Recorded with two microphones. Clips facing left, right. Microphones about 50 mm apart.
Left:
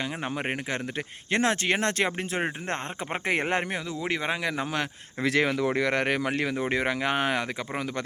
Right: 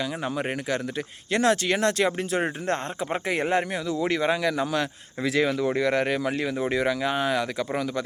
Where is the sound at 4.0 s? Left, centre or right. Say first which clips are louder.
Right 5 dB; centre.